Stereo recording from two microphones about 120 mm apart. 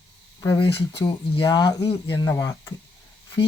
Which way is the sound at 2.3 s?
30° left (ahead or behind).